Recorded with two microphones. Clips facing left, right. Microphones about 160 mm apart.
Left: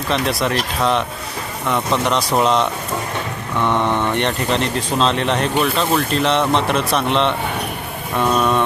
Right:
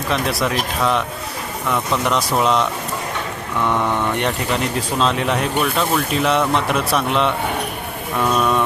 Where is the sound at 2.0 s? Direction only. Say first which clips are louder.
Even; centre (ahead or behind).